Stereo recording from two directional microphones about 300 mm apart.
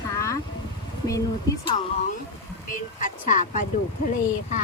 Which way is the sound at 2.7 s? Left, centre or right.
Left.